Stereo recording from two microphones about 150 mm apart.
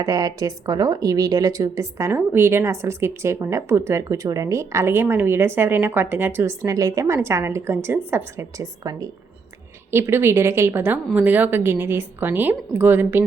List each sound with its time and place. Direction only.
0.0 s a woman's voice: 25° right (ahead or behind)